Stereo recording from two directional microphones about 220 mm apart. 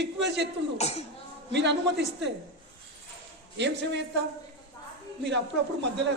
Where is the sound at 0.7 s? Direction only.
30° left (ahead or behind).